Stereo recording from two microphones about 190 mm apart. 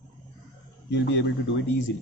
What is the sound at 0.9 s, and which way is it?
Speech, 65° left (ahead or behind).